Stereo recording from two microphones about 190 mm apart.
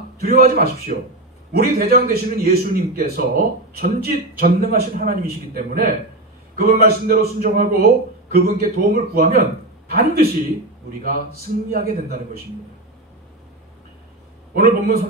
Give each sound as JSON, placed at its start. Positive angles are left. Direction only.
{"t": 0.2, "sound": "a man's voice", "side_deg": -50}
{"t": 11.7, "sound": "a man's voice", "side_deg": -50}
{"t": 14.5, "sound": "a man's voice", "side_deg": -50}